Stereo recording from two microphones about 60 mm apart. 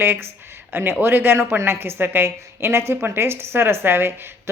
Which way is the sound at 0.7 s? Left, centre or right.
Right.